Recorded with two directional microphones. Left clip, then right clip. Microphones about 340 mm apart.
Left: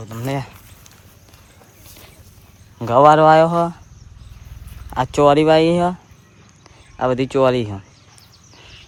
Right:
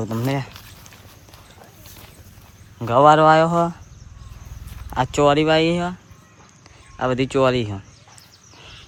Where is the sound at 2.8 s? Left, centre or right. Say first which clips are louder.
Left 2 dB; centre.